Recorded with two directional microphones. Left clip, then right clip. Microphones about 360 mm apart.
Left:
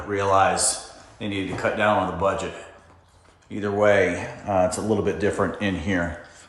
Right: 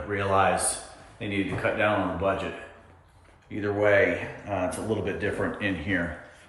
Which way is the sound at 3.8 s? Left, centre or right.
Centre.